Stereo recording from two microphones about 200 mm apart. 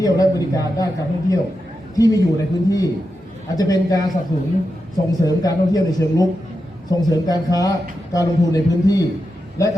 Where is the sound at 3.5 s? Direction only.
15° left (ahead or behind).